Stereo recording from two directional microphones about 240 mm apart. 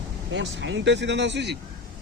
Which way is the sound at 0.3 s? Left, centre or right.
Right.